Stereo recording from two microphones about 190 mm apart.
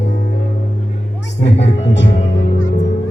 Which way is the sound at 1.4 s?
70° left (ahead or behind).